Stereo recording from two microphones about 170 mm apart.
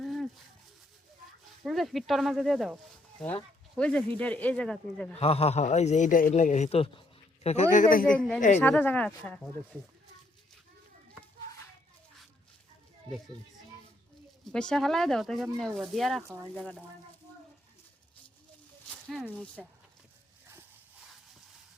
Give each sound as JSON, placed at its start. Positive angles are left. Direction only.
{"t": 0.0, "sound": "a sound", "side_deg": 0}
{"t": 1.6, "sound": "speech", "side_deg": 0}
{"t": 3.8, "sound": "speech", "side_deg": 5}
{"t": 5.1, "sound": "a man's voice", "side_deg": 35}
{"t": 8.5, "sound": "speech", "side_deg": 10}
{"t": 14.4, "sound": "speech", "side_deg": 5}
{"t": 19.0, "sound": "speech", "side_deg": 0}